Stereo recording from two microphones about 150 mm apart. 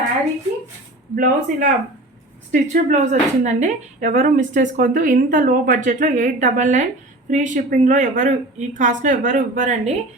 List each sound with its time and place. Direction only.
1.1 s a woman's voice: 60° right (ahead or behind)